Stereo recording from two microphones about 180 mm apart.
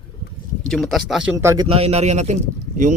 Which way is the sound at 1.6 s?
35° right (ahead or behind).